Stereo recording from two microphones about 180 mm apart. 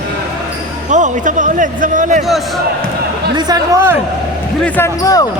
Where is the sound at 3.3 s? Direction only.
20° right (ahead or behind).